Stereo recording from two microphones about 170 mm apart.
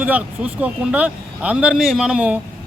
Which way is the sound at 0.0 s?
10° right (ahead or behind).